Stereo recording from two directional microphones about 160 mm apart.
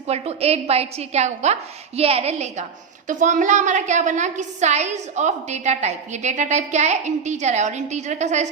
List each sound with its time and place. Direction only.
0.1 s a woman's voice: 40° right (ahead or behind)
3.1 s a woman's voice: 55° right (ahead or behind)